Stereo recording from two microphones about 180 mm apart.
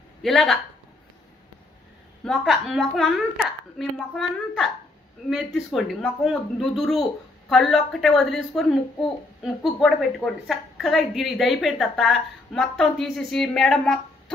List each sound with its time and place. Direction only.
0.2 s a woman's voice: centre (ahead or behind)
2.2 s a woman's voice: centre (ahead or behind)